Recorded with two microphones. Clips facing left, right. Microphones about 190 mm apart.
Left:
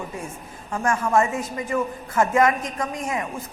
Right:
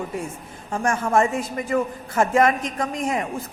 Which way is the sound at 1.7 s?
30° right (ahead or behind).